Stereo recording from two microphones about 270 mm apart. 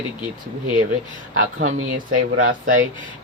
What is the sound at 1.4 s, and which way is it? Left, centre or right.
Speech, right.